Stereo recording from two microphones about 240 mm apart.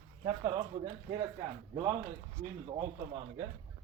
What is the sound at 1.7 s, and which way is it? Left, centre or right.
Speech, centre.